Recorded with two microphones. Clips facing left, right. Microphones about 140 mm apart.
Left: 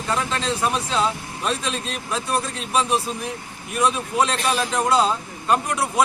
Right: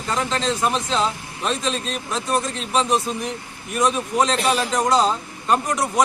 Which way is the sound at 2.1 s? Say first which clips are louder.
Right 1 dB; 35° right (ahead or behind).